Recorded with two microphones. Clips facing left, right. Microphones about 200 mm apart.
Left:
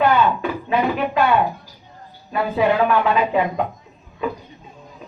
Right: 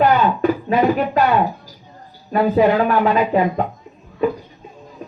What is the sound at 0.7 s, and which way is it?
Speech, 40° right (ahead or behind).